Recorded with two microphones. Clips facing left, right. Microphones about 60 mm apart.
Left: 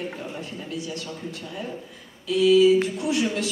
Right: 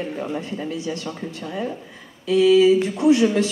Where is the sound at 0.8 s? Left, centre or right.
Right.